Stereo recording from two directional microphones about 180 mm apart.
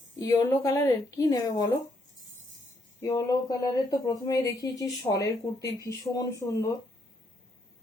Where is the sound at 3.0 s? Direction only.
20° left (ahead or behind).